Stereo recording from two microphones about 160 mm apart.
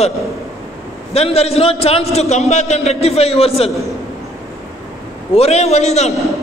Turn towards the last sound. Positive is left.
turn(degrees=45)  # may be behind; listen again after turning